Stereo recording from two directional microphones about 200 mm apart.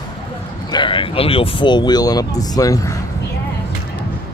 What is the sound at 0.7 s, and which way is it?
Speech, 25° left (ahead or behind).